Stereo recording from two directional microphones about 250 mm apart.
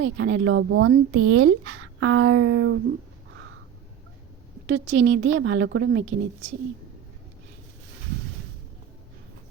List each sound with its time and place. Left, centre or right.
0.0 s a woman's voice: right
4.7 s a woman's voice: right